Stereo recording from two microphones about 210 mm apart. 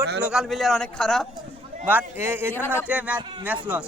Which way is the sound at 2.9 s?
5° right (ahead or behind).